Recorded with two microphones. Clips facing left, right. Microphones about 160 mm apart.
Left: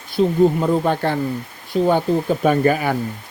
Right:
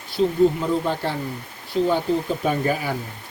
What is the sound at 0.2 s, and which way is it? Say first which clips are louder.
Speech: left 3 dB; 55° left (ahead or behind).